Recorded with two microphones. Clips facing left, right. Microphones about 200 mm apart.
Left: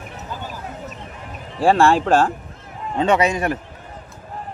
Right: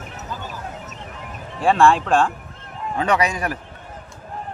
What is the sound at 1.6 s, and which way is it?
Speech, 35° left (ahead or behind).